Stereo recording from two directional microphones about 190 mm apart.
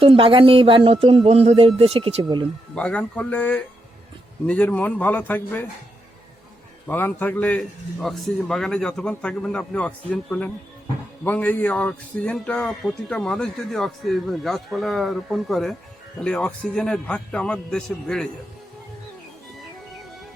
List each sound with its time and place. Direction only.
0.0 s speech: 30° right (ahead or behind)
2.7 s a man's voice: 5° left (ahead or behind)
6.8 s a man's voice: 10° left (ahead or behind)